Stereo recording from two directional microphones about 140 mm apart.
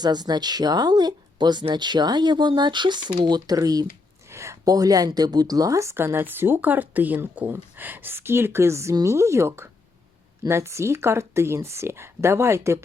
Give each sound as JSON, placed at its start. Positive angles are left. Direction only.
{"t": 0.0, "sound": "speech", "side_deg": -30}